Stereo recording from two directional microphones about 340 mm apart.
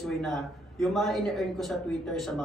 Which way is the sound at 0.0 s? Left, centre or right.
Centre.